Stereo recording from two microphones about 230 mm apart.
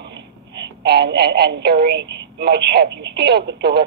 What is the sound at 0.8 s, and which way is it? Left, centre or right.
Speech, right.